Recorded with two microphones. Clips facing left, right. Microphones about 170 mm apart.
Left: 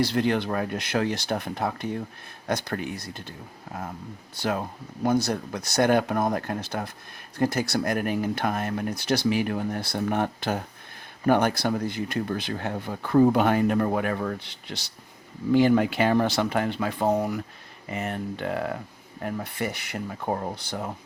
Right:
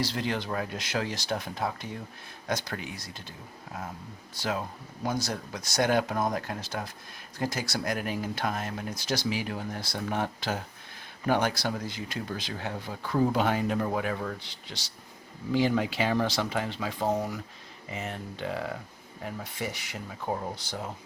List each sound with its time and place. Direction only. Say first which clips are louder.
0.0 s speech: left 7 dB; 60° left (ahead or behind)
4.4 s speech: left 4 dB; 55° left (ahead or behind)